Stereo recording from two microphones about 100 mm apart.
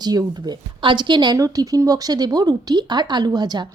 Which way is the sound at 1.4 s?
35° right (ahead or behind).